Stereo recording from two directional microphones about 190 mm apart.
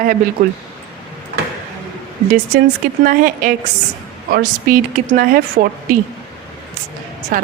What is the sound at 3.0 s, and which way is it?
Speech, 45° right (ahead or behind).